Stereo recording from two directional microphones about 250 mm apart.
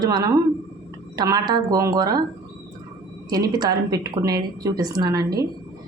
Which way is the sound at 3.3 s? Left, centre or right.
Centre.